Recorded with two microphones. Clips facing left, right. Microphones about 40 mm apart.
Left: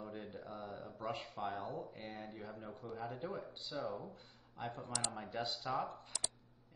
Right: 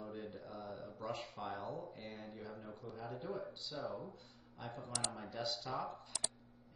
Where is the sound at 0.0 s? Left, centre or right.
Left.